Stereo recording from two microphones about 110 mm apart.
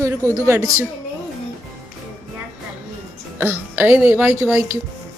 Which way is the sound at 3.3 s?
20° right (ahead or behind).